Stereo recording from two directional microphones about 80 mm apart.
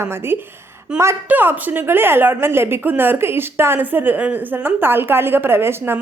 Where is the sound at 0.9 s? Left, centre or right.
Centre.